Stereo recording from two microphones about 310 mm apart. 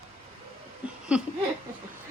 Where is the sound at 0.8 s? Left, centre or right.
Centre.